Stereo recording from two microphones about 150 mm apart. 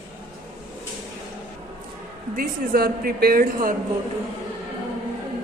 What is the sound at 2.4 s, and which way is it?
Speech, 75° right (ahead or behind).